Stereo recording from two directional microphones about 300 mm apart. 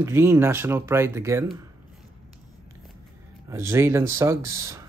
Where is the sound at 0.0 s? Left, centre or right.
Centre.